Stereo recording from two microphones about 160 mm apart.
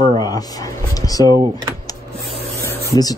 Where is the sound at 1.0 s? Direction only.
20° left (ahead or behind).